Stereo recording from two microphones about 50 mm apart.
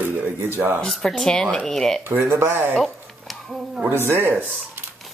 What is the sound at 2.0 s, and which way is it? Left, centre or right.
Speech, right.